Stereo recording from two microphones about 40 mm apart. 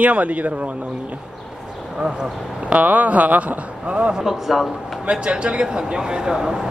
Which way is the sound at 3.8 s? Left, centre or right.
Right.